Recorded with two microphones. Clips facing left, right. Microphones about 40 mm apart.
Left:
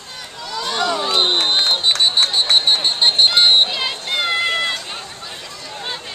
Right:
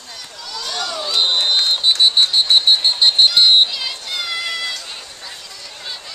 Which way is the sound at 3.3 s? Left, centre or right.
Left.